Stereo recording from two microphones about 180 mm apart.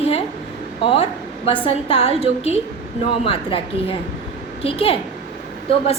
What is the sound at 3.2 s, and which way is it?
A woman's voice, 30° left (ahead or behind).